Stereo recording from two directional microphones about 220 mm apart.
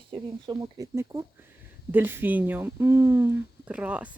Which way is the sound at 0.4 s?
15° right (ahead or behind).